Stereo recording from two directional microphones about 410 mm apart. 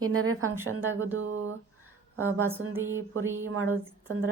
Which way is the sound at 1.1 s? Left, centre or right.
Right.